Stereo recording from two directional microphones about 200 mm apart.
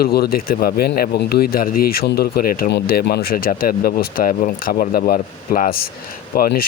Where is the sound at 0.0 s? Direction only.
50° left (ahead or behind).